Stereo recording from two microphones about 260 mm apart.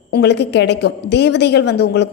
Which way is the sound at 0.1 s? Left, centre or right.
Left.